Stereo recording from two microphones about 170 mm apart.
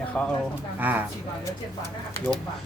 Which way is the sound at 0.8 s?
10° right (ahead or behind).